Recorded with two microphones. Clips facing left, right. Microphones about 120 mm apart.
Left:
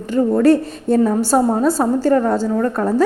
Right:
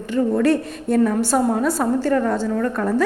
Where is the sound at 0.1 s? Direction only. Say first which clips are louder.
Left 4 dB; 35° left (ahead or behind).